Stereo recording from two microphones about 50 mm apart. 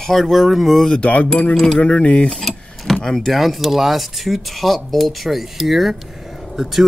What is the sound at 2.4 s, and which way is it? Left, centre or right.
Speech, centre.